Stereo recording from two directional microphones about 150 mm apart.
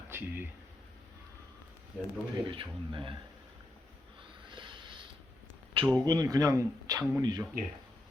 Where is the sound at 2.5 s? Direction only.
35° right (ahead or behind).